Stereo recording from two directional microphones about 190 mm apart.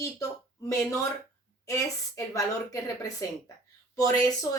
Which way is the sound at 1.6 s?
15° left (ahead or behind).